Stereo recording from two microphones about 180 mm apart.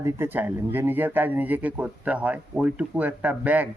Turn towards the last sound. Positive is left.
turn(degrees=-10)  # may be behind; listen again after turning